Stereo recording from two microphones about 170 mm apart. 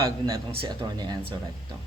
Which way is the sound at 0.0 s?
20° right (ahead or behind).